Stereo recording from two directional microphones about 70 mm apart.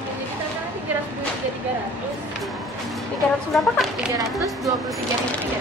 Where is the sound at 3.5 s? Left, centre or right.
Centre.